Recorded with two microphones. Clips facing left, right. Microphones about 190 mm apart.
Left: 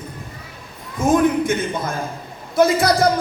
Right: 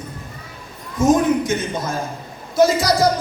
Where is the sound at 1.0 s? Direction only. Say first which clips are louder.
Even; 55° left (ahead or behind).